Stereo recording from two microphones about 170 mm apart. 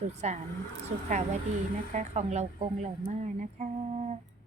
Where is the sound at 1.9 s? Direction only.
45° right (ahead or behind).